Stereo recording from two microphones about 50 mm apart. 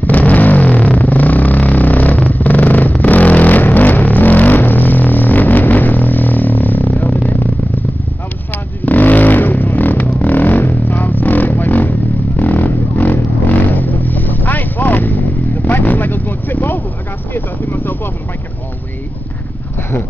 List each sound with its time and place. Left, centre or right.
0.1 s vehicle: left
8.8 s vehicle: left
9.8 s a sound: left
10.1 s vehicle: left
11.1 s music: left
12.4 s vehicle: left